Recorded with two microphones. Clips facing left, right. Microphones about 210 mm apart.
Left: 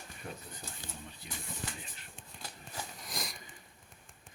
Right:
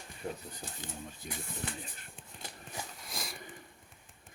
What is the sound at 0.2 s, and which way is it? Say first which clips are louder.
Speech: right 6 dB; 25° right (ahead or behind).